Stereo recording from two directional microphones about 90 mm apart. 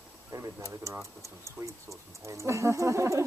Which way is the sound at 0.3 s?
35° right (ahead or behind).